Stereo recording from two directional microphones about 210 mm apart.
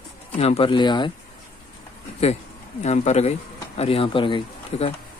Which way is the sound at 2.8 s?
30° left (ahead or behind).